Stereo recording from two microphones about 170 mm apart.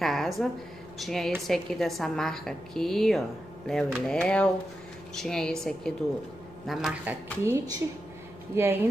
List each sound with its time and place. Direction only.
0.0 s a sound: centre (ahead or behind)
0.9 s a woman's voice: centre (ahead or behind)
7.4 s a woman's voice: 20° right (ahead or behind)